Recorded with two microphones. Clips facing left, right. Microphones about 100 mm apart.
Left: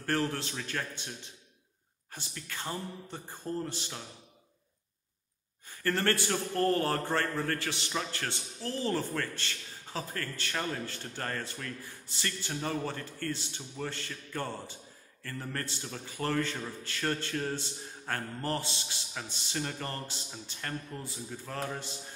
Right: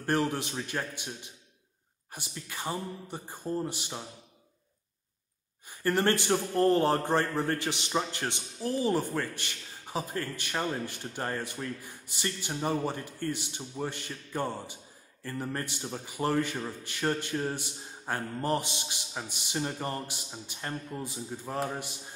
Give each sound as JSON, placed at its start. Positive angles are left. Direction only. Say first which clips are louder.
{"t": 0.0, "sound": "a man's voice", "louder": "right 3 dB", "side_deg": -20}
{"t": 5.7, "sound": "a man's voice", "louder": "right 3 dB", "side_deg": -15}